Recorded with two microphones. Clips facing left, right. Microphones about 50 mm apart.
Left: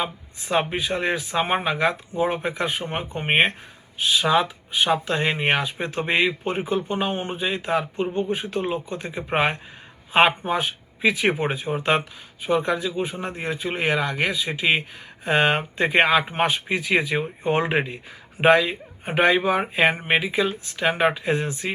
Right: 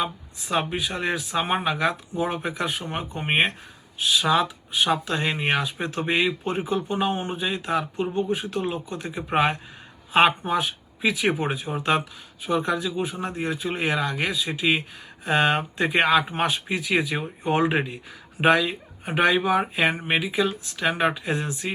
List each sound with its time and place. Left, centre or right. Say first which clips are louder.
0.0 s speech: even; left